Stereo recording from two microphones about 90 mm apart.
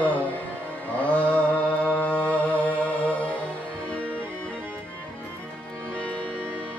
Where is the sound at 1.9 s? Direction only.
15° left (ahead or behind).